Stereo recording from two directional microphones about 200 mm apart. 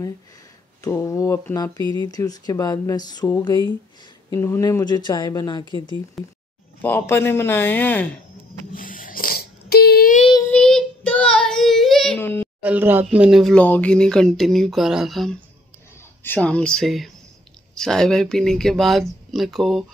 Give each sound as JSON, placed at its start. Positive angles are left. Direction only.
{"t": 0.8, "sound": "speech", "side_deg": 15}
{"t": 1.8, "sound": "speech", "side_deg": -25}
{"t": 2.0, "sound": "speech", "side_deg": 20}
{"t": 6.2, "sound": "speech", "side_deg": 0}
{"t": 6.8, "sound": "speech", "side_deg": 10}
{"t": 8.7, "sound": "a sound", "side_deg": 45}
{"t": 10.5, "sound": "child singing", "side_deg": 5}
{"t": 12.5, "sound": "speech", "side_deg": -10}